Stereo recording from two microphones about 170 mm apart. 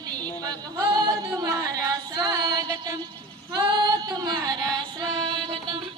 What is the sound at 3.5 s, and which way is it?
Female singing, 25° right (ahead or behind).